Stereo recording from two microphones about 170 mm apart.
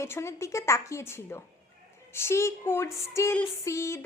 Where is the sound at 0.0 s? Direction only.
15° left (ahead or behind).